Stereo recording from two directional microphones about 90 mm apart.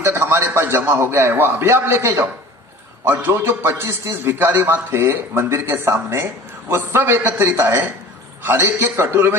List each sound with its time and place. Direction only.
0.0 s a man's voice: 25° right (ahead or behind)